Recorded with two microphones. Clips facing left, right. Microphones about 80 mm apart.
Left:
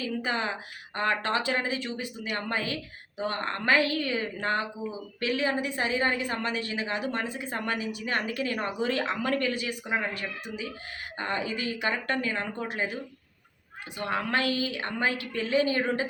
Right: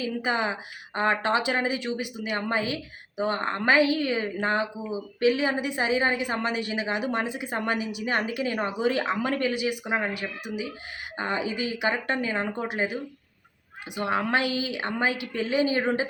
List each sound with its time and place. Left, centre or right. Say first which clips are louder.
0.0 s a woman's voice: right 3 dB; centre